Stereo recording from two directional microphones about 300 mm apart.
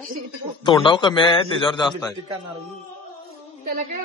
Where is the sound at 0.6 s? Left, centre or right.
Centre.